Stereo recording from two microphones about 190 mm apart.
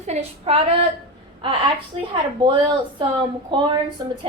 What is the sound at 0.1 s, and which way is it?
Speech, 30° right (ahead or behind).